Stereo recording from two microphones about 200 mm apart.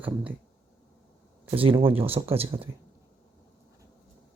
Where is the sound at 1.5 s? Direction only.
25° right (ahead or behind).